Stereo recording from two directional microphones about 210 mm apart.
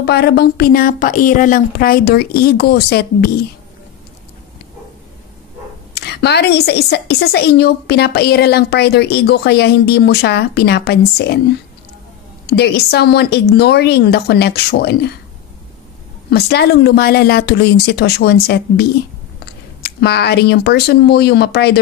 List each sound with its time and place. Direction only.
0.0 s a woman's voice: 50° left (ahead or behind)
5.9 s a woman's voice: 50° left (ahead or behind)
12.4 s a woman's voice: 50° left (ahead or behind)
16.3 s a woman's voice: 50° left (ahead or behind)